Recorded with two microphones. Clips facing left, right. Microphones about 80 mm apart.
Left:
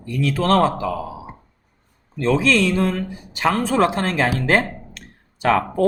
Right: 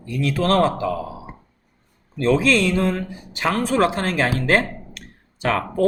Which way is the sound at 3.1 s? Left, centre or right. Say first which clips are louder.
Left 2 dB; left.